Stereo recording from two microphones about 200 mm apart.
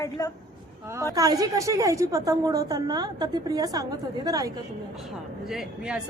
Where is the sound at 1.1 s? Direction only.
20° right (ahead or behind).